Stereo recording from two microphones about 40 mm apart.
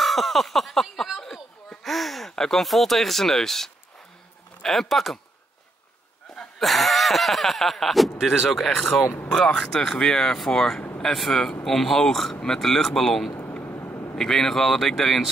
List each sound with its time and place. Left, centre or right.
0.0 s a sound: centre
2.3 s speech: centre
6.6 s speech: centre
9.3 s speech: centre
13.7 s vehicle: left
14.1 s speech: centre